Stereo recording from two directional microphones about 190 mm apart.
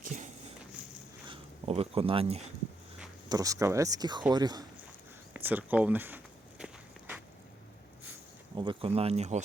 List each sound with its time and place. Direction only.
1.3 s speech: 30° right (ahead or behind)
3.2 s speech: 20° right (ahead or behind)
5.3 s walk: 10° right (ahead or behind)
8.5 s speech: 25° right (ahead or behind)